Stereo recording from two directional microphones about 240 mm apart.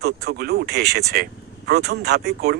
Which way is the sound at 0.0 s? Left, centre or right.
Right.